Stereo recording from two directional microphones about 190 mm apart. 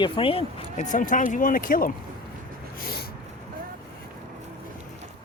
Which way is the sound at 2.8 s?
55° left (ahead or behind).